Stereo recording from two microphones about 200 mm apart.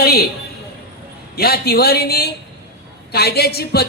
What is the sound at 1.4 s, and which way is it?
Speech, 50° left (ahead or behind).